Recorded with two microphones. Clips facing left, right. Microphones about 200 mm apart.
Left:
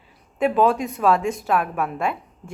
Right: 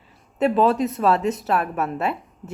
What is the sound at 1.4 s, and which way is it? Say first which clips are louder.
Speech: even; 5° right (ahead or behind).